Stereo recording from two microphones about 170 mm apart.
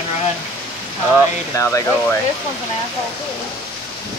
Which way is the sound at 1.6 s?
15° left (ahead or behind).